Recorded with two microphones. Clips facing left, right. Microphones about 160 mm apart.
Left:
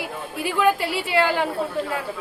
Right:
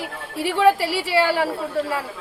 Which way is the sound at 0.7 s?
30° right (ahead or behind).